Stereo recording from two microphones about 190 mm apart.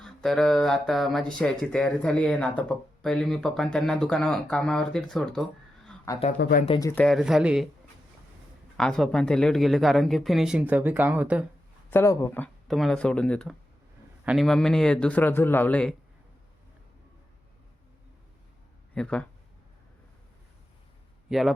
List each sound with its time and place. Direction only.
0.0 s speech: centre (ahead or behind)
6.4 s speech: 50° left (ahead or behind)
6.7 s speech: 20° left (ahead or behind)
7.0 s speech: centre (ahead or behind)
8.8 s speech: 5° left (ahead or behind)
11.9 s speech: 15° left (ahead or behind)
18.9 s speech: 5° left (ahead or behind)
21.2 s speech: centre (ahead or behind)